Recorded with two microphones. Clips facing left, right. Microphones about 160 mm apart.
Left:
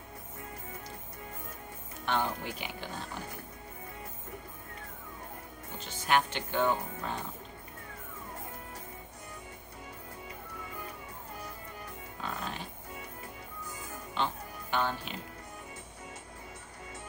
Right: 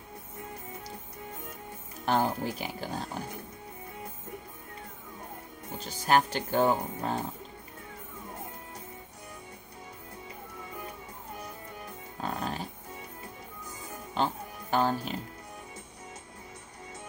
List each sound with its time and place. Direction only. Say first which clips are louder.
2.0 s speech: right 5 dB; 40° right (ahead or behind)
5.8 s speech: right 4 dB; 40° right (ahead or behind)
12.4 s music: right 5 dB; 40° right (ahead or behind)
14.1 s music: right 4 dB; 40° right (ahead or behind)